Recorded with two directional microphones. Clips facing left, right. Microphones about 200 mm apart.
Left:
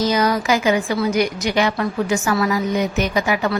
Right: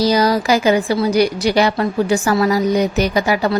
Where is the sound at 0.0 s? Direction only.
35° right (ahead or behind).